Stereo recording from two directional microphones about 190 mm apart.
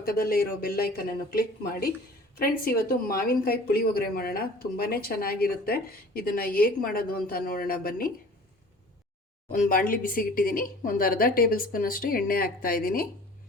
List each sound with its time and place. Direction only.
0.0 s speech: 50° left (ahead or behind)
9.5 s speech: 45° left (ahead or behind)